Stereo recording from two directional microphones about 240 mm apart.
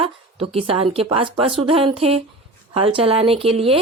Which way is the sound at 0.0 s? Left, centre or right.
Right.